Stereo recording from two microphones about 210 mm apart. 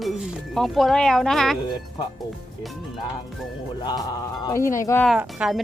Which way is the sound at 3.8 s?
20° left (ahead or behind).